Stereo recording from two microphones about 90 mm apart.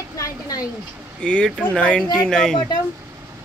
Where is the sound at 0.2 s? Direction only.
40° left (ahead or behind).